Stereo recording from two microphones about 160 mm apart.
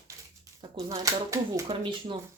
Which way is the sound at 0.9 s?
20° right (ahead or behind).